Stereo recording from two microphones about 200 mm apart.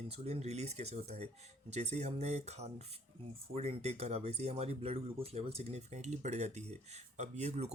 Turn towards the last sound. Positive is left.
turn(degrees=-35)  # may be behind; listen again after turning